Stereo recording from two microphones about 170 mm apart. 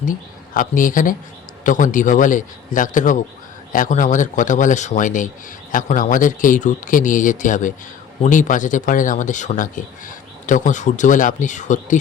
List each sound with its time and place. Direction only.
0.5 s speech: 50° left (ahead or behind)